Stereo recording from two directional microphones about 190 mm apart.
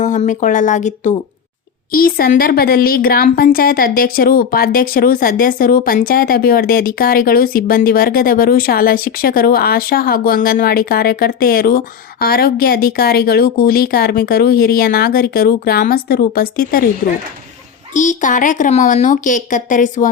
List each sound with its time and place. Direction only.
0.0 s speech: 40° left (ahead or behind)
1.9 s speech: 50° left (ahead or behind)
17.9 s speech: 40° left (ahead or behind)